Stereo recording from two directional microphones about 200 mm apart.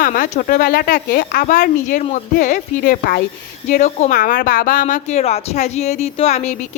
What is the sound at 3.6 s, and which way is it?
A woman's voice, 35° left (ahead or behind).